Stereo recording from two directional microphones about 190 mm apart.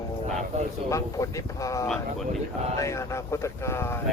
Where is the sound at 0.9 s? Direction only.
15° left (ahead or behind).